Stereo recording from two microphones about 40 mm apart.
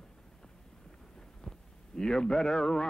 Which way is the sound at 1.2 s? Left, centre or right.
Centre.